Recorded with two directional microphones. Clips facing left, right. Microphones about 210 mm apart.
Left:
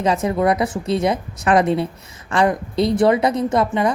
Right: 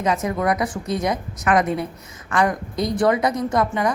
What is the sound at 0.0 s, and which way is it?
Speech, 30° left (ahead or behind).